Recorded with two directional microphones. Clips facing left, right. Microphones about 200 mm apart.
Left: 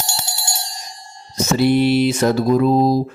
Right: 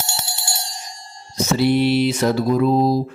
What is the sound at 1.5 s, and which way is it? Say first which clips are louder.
Mantra: left 2 dB; 50° left (ahead or behind).